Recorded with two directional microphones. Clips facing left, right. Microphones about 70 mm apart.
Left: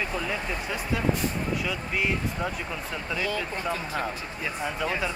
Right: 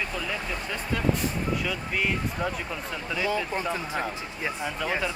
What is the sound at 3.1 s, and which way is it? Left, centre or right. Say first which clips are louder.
Speech: right 3 dB; right.